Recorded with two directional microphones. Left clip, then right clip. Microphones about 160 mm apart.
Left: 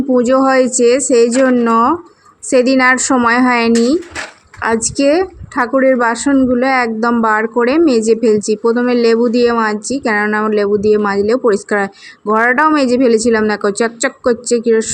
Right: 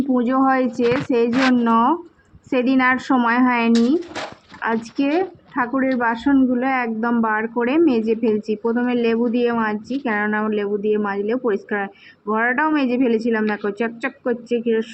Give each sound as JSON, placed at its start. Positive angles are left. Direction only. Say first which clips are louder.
{"t": 0.1, "sound": "a woman's voice", "louder": "left 8 dB", "side_deg": 15}